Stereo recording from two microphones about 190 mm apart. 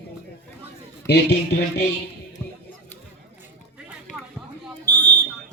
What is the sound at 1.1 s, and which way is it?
Speech, 60° left (ahead or behind).